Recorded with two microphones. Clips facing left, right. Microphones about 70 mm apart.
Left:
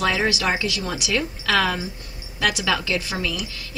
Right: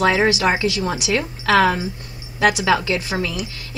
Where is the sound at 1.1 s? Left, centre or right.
Right.